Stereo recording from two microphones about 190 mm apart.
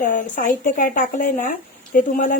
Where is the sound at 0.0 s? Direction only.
45° left (ahead or behind).